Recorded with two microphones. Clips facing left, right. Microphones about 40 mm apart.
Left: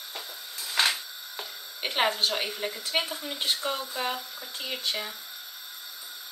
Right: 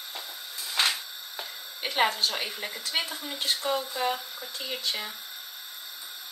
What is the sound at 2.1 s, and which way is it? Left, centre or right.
Speech, left.